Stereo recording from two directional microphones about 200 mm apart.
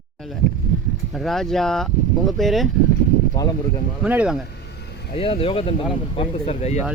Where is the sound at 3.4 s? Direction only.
20° left (ahead or behind).